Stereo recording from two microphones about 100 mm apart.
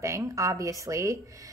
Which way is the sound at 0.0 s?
30° right (ahead or behind).